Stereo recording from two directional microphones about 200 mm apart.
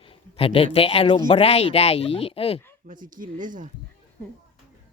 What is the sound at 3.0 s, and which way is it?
Speech, 40° right (ahead or behind).